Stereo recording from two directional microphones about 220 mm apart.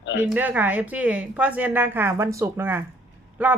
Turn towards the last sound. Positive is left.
turn(degrees=-5)  # may be behind; listen again after turning